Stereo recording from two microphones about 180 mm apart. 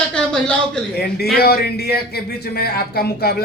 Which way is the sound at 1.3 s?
60° left (ahead or behind).